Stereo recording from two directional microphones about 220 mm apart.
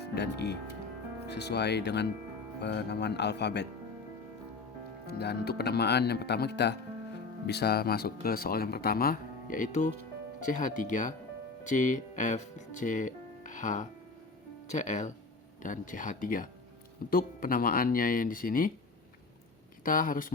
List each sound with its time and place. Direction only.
0.1 s speech: 50° left (ahead or behind)
5.0 s speech: 45° left (ahead or behind)
19.8 s speech: 40° left (ahead or behind)